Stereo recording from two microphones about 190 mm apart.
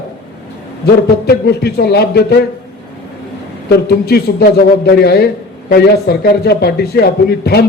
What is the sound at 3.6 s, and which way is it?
Speech, 55° left (ahead or behind).